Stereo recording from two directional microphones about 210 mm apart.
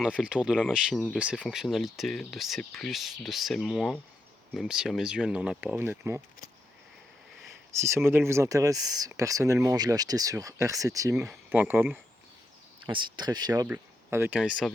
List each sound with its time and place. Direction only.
0.0 s speech: 5° right (ahead or behind)
0.9 s speech: 5° left (ahead or behind)
1.2 s speech: 5° right (ahead or behind)
7.8 s speech: 15° right (ahead or behind)
12.8 s speech: 25° right (ahead or behind); by 14.7 s 5° right (ahead or behind)